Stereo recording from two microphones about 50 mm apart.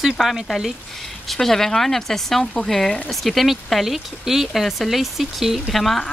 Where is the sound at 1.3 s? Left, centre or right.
Centre.